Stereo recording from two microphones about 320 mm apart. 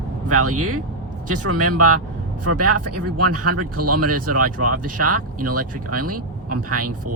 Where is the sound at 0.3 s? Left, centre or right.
Right.